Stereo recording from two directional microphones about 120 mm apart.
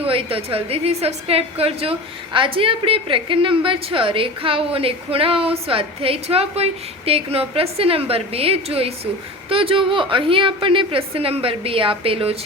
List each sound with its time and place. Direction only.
0.0 s a woman's voice: 50° right (ahead or behind)